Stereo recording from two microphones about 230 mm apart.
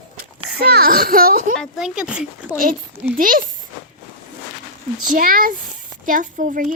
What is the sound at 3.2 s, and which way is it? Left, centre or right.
Speech, right.